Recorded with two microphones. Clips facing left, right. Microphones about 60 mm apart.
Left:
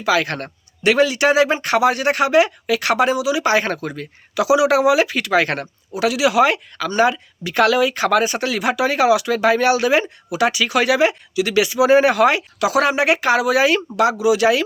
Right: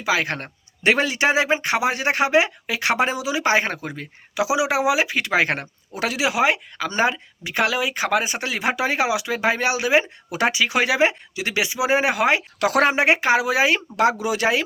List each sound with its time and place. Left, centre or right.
0.0 s speech: right
5.9 s speech: right
7.5 s speech: centre
10.3 s speech: right
12.5 s speech: right